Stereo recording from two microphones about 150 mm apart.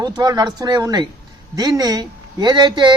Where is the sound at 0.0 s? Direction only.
25° right (ahead or behind).